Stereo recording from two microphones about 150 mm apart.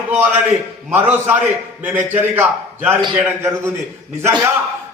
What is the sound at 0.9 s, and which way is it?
A man's voice, 10° right (ahead or behind).